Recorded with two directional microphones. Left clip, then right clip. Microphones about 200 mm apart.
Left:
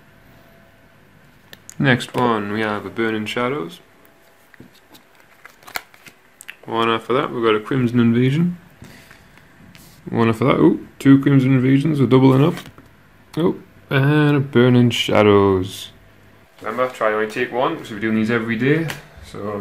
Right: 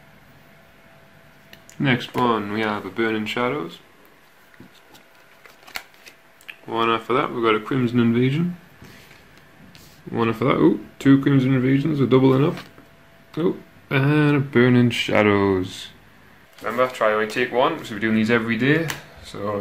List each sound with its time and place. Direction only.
1.5 s speech: 30° left (ahead or behind); by 3.8 s 10° left (ahead or behind)
6.4 s a sound: 20° left (ahead or behind)
7.1 s speech: 5° left (ahead or behind)
9.7 s speech: 20° left (ahead or behind)
13.8 s speech: 10° left (ahead or behind)
16.6 s speech: 10° right (ahead or behind)